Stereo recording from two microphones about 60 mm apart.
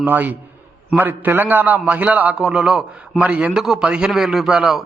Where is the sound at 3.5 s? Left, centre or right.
Centre.